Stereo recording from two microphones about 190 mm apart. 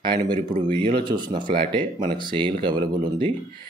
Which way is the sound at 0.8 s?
25° right (ahead or behind).